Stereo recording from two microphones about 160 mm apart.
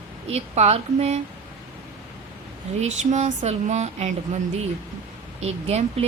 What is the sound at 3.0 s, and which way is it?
Speech, 50° right (ahead or behind).